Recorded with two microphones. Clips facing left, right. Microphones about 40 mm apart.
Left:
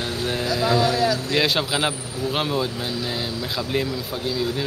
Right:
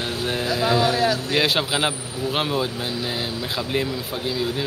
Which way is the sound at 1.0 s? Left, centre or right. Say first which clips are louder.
Even; right.